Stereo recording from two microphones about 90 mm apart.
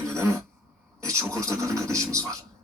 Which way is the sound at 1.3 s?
35° right (ahead or behind).